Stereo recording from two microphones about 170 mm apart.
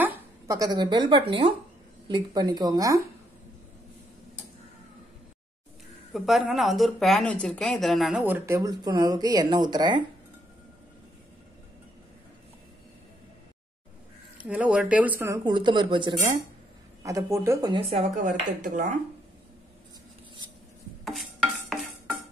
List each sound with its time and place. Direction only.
0.0 s a sound: 10° right (ahead or behind)
0.6 s speech: 25° right (ahead or behind)
6.1 s speech: centre (ahead or behind); by 10.0 s 25° right (ahead or behind)
14.4 s speech: 10° right (ahead or behind)
15.4 s speech: 25° right (ahead or behind); by 18.9 s 50° right (ahead or behind)
21.0 s stir: centre (ahead or behind)